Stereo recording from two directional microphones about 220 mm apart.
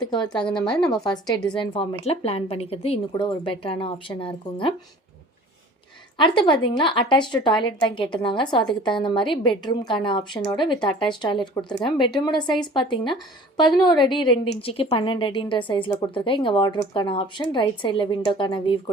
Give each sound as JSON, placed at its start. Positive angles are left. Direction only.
{"t": 0.0, "sound": "a woman's voice", "side_deg": 20}
{"t": 0.3, "sound": "a woman's voice", "side_deg": 5}
{"t": 1.5, "sound": "a woman's voice", "side_deg": 20}
{"t": 6.1, "sound": "a woman's voice", "side_deg": 20}